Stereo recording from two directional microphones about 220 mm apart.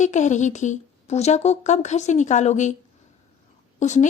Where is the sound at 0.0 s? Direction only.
35° left (ahead or behind).